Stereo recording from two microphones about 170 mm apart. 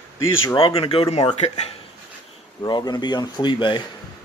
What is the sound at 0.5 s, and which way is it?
Speech, 30° left (ahead or behind).